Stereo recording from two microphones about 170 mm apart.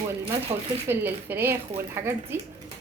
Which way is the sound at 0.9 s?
15° right (ahead or behind).